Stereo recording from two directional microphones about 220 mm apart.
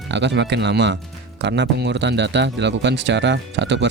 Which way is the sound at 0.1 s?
50° right (ahead or behind).